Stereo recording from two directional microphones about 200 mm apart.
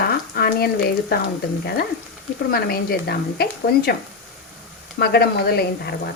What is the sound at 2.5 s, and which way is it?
Speech, 50° left (ahead or behind).